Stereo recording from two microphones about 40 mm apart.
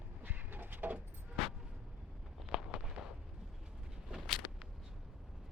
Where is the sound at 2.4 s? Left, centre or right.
Right.